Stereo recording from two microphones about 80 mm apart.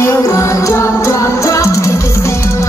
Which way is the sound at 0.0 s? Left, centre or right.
Left.